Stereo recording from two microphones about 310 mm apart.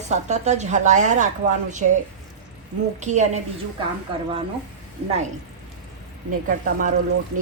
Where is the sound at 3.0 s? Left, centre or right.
Right.